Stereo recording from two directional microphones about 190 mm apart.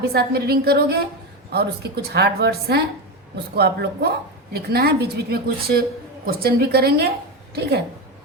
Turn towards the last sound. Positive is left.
turn(degrees=-60)  # may be behind; listen again after turning